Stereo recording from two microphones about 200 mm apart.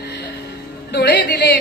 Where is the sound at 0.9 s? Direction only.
60° left (ahead or behind).